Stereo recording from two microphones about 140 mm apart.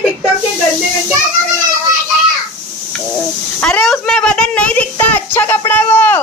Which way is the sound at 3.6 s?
5° left (ahead or behind).